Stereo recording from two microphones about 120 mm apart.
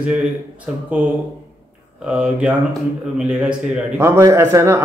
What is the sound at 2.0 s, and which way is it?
A man's voice, 10° right (ahead or behind).